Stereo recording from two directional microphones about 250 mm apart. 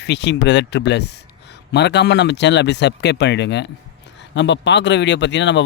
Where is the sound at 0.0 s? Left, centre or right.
Left.